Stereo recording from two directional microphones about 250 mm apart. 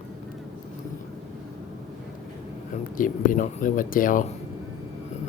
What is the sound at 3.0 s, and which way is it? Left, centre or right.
Speech, left.